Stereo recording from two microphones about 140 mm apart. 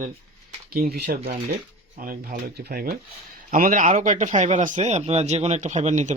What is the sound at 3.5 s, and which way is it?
Speech, 75° right (ahead or behind).